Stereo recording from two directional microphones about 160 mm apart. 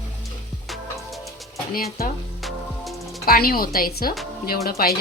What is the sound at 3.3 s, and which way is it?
Speech, 70° left (ahead or behind).